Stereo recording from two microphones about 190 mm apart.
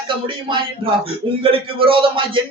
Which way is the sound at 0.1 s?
25° right (ahead or behind).